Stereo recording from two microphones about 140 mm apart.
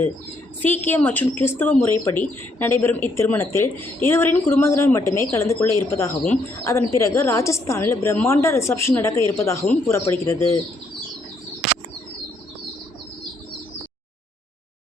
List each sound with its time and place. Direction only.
0.6 s speech: 10° left (ahead or behind)